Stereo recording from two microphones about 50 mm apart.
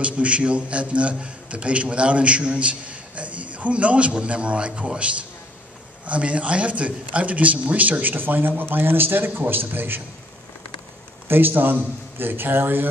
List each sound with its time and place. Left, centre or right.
0.0 s a man's voice: right
11.2 s a man's voice: right